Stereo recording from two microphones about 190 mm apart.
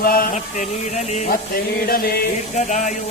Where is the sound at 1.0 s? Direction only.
40° left (ahead or behind).